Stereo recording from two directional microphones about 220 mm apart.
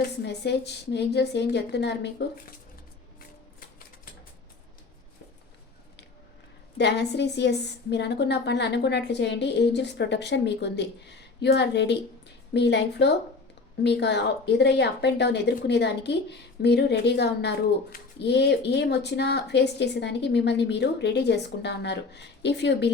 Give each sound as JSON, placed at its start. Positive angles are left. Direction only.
{"t": 0.3, "sound": "a woman's voice", "side_deg": 50}
{"t": 6.7, "sound": "a woman's voice", "side_deg": 50}